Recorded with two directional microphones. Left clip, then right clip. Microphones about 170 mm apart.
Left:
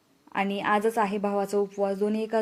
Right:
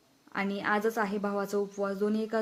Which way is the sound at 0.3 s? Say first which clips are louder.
Left 5 dB; 15° left (ahead or behind).